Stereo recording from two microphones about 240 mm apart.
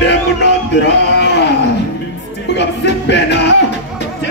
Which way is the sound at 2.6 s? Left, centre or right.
Left.